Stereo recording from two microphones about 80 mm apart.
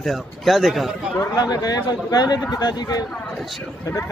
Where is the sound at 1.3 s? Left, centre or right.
Left.